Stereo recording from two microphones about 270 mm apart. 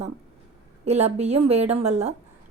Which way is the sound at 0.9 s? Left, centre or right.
Right.